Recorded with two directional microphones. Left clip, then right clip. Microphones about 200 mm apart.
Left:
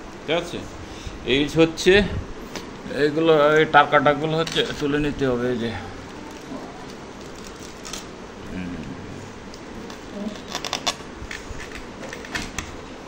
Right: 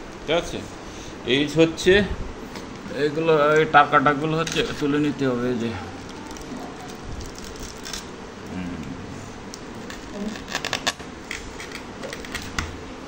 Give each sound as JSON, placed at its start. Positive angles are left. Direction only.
{"t": 0.3, "sound": "speech", "side_deg": 10}